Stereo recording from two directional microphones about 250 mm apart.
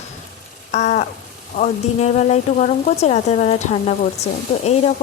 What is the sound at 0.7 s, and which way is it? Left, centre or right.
A woman's voice, left.